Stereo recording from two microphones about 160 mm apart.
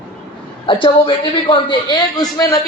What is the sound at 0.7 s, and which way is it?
A woman's voice, 30° left (ahead or behind).